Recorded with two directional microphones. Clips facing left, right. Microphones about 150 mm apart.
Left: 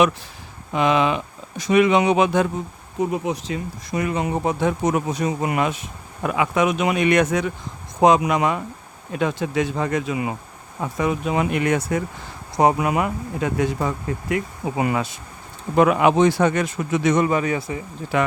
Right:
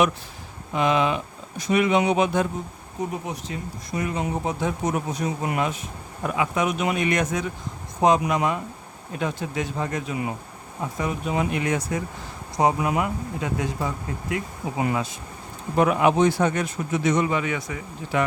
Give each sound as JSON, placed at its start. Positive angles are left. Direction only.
{"t": 0.7, "sound": "speech", "side_deg": 90}
{"t": 6.2, "sound": "speech", "side_deg": 75}
{"t": 8.0, "sound": "speech", "side_deg": 90}
{"t": 15.7, "sound": "speech", "side_deg": 90}
{"t": 17.2, "sound": "speech", "side_deg": 40}